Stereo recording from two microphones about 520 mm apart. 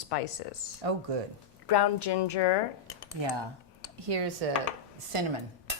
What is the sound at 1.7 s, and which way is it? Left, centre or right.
Speech, left.